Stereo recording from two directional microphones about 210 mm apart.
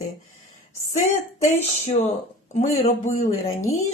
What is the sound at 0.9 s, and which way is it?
Speech, 35° left (ahead or behind).